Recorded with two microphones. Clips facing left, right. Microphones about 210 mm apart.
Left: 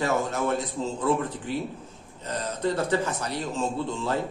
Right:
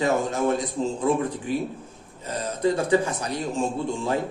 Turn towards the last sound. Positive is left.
turn(degrees=-15)  # may be behind; listen again after turning